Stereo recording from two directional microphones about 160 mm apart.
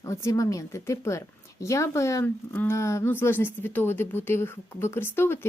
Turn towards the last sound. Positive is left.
turn(degrees=15)  # may be behind; listen again after turning